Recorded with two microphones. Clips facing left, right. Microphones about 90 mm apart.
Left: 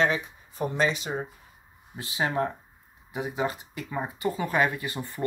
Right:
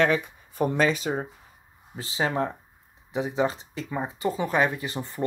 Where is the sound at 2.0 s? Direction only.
30° right (ahead or behind).